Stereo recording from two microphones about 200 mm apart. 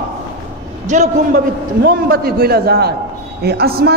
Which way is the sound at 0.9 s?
35° right (ahead or behind).